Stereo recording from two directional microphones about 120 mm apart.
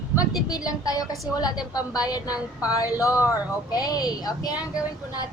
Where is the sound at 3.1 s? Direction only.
15° right (ahead or behind).